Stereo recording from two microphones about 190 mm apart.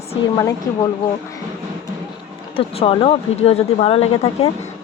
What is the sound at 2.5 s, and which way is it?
Speech, 30° left (ahead or behind).